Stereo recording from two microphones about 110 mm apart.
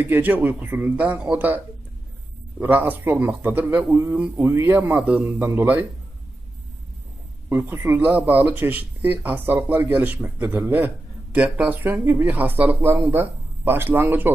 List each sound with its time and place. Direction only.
0.0 s speech: 15° right (ahead or behind)
2.6 s a man's voice: 15° right (ahead or behind)
7.4 s speech: 20° right (ahead or behind)